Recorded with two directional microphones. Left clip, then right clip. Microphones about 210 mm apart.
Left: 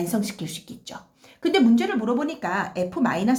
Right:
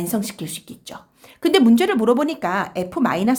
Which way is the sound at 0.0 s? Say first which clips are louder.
Right 2 dB; 25° right (ahead or behind).